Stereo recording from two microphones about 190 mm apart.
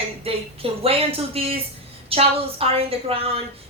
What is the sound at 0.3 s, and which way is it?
A woman's voice, 30° right (ahead or behind).